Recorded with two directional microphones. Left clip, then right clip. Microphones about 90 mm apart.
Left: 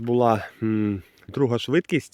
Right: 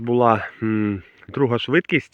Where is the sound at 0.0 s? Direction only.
20° left (ahead or behind).